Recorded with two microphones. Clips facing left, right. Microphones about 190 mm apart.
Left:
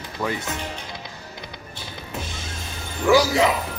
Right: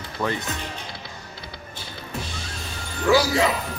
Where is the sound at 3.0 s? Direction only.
20° left (ahead or behind).